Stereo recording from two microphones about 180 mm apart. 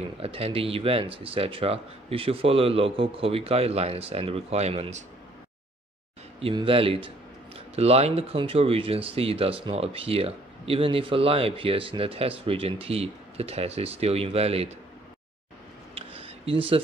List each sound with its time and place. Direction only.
0.2 s speech: 30° right (ahead or behind)
6.4 s speech: 30° right (ahead or behind)
15.9 s a sound: 30° right (ahead or behind)